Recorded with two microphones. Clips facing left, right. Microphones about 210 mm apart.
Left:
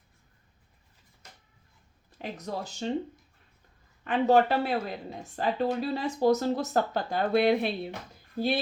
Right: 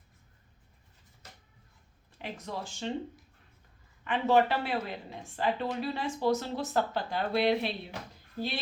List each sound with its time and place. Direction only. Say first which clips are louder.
2.1 s speech: left 3 dB; 40° left (ahead or behind)
4.0 s speech: left 3 dB; 40° left (ahead or behind)